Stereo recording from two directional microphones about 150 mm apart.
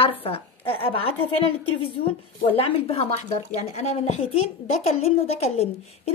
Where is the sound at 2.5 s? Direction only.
40° left (ahead or behind).